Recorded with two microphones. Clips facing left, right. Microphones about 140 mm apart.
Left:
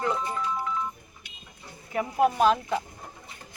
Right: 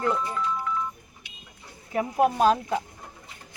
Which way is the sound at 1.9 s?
40° right (ahead or behind).